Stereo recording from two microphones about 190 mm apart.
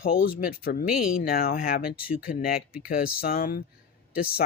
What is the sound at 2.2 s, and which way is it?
Speech, 50° left (ahead or behind).